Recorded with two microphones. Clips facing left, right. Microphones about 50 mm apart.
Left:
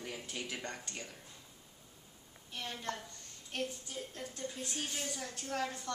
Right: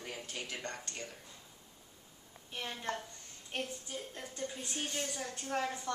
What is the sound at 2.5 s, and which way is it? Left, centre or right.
A woman's voice, centre.